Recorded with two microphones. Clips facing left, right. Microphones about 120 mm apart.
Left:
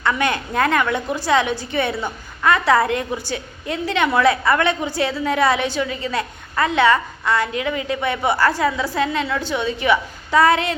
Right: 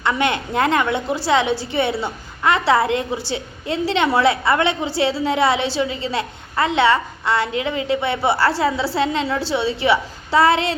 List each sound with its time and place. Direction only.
0.0 s a woman's voice: 25° right (ahead or behind)